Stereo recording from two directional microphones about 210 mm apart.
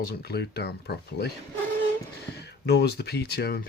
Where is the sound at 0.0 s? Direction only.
50° left (ahead or behind).